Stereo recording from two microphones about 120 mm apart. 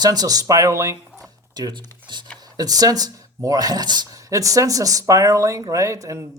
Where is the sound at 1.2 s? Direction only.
35° right (ahead or behind).